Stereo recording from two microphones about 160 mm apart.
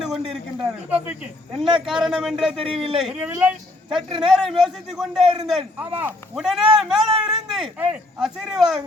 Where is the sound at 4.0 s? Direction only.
30° right (ahead or behind).